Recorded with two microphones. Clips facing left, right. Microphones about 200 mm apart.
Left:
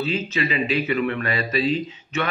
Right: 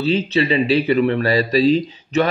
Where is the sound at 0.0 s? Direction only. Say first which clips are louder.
Right 7 dB; 35° right (ahead or behind).